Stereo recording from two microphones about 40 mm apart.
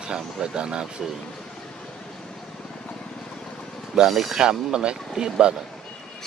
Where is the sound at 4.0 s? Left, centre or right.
Centre.